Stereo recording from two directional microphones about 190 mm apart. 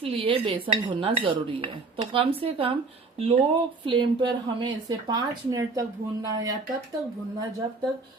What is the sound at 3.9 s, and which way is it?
Speech, 25° right (ahead or behind).